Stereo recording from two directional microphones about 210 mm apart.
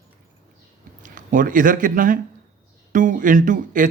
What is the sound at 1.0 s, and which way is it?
Speech, 40° right (ahead or behind).